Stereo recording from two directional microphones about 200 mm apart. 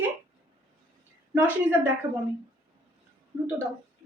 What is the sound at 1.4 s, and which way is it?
Speech, 10° right (ahead or behind).